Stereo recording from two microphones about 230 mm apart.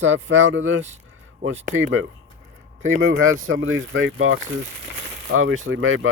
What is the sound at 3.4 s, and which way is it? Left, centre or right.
Speech, right.